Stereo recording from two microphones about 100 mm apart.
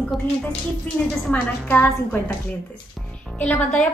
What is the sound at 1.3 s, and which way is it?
A woman's voice, 15° left (ahead or behind).